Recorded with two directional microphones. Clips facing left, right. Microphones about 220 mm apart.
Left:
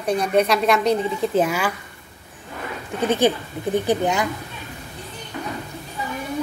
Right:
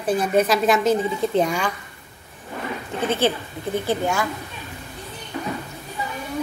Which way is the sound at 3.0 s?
15° left (ahead or behind).